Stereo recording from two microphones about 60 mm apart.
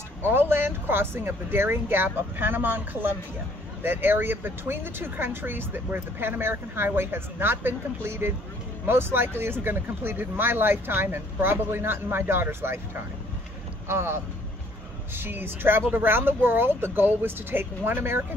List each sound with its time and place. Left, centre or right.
0.2 s speech: right